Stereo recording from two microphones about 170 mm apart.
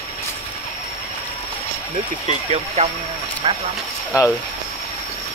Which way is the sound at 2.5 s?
40° right (ahead or behind).